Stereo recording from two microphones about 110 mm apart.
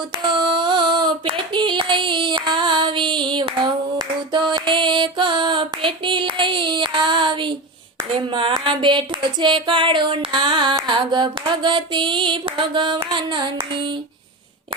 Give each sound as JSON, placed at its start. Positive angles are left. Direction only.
{"t": 0.3, "sound": "female singing", "side_deg": -45}
{"t": 8.3, "sound": "music", "side_deg": -50}